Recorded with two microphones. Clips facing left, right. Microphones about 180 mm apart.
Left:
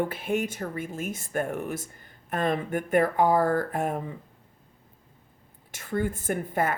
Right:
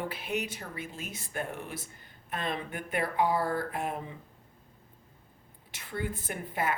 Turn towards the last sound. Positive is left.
turn(degrees=45)  # may be behind; listen again after turning